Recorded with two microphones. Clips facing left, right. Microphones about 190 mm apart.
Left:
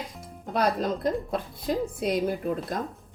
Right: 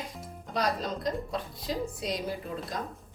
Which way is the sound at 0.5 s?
55° left (ahead or behind).